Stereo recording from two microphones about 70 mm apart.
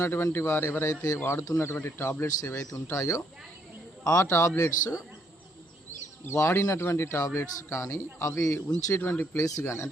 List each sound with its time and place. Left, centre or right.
0.0 s speech: left
6.2 s speech: left
9.0 s speech: left
9.3 s speech: left